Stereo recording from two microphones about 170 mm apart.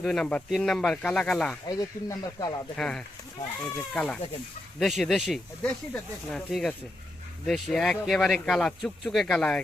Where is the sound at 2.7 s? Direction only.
5° left (ahead or behind).